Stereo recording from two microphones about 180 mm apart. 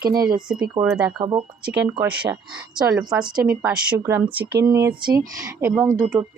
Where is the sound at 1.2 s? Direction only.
25° right (ahead or behind).